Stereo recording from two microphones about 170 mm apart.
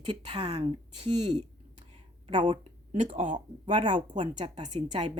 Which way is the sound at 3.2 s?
50° right (ahead or behind).